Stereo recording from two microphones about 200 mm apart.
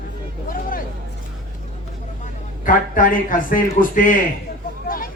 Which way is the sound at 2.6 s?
45° left (ahead or behind).